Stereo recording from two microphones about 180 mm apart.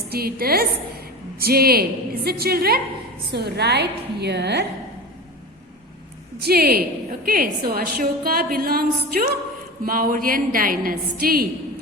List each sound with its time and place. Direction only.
0.1 s a woman's voice: 60° right (ahead or behind)
6.4 s a woman's voice: 60° right (ahead or behind)